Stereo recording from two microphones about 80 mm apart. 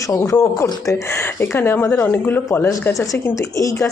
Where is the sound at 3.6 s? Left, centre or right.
Left.